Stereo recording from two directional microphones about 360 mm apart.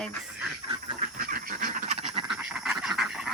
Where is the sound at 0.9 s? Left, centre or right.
Right.